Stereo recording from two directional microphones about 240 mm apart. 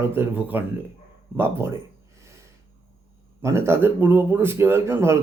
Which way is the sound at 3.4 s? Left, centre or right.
Centre.